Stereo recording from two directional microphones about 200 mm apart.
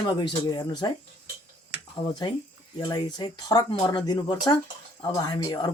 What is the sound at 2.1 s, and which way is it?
Speech, 20° left (ahead or behind).